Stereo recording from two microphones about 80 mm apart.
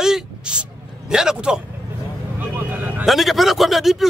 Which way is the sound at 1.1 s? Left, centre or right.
Centre.